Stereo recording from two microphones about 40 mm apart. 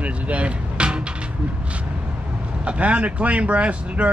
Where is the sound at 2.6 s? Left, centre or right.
Right.